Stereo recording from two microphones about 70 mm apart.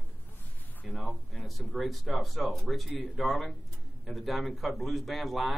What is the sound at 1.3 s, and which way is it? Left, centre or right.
A man's voice, centre.